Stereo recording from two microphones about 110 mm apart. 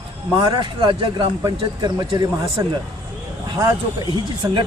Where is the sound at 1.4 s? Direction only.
35° right (ahead or behind).